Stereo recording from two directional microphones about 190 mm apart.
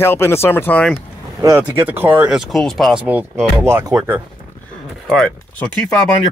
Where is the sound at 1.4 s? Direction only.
15° right (ahead or behind).